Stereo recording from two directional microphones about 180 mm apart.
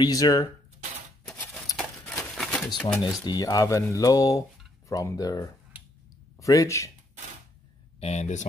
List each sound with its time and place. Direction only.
0.0 s speech: 20° left (ahead or behind)
1.8 s a sound: centre (ahead or behind)
3.3 s speech: 20° left (ahead or behind)
8.0 s speech: 40° left (ahead or behind)